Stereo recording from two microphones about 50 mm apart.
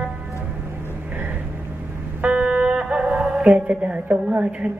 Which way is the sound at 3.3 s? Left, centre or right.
Right.